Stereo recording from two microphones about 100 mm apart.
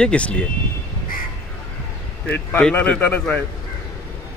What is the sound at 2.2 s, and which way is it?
A man's voice, 10° left (ahead or behind).